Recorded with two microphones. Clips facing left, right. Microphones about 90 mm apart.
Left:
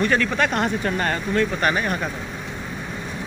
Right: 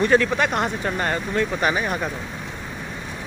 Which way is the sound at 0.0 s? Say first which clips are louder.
Right 2 dB; 25° right (ahead or behind).